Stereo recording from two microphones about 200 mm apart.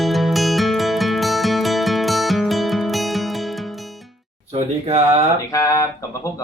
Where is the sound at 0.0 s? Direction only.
Centre (ahead or behind).